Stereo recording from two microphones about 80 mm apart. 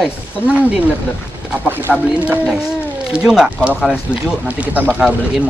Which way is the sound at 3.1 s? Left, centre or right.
Centre.